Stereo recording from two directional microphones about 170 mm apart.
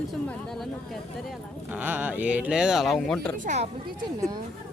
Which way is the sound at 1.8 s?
10° right (ahead or behind).